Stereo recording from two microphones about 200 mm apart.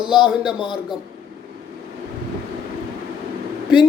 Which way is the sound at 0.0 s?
5° right (ahead or behind).